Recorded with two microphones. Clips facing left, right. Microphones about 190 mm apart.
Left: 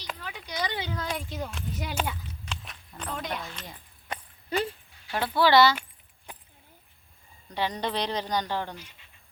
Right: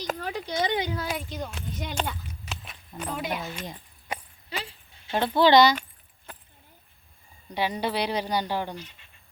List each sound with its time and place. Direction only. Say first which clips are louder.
0.0 s a sound: right 8 dB; 45° right (ahead or behind)
0.4 s speech: right 5 dB; 25° right (ahead or behind); by 2.1 s 5° left (ahead or behind)
2.2 s horse: even; 5° right (ahead or behind)
5.0 s speech: right 3 dB; 20° right (ahead or behind)
7.5 s speech: right 2 dB; 10° right (ahead or behind)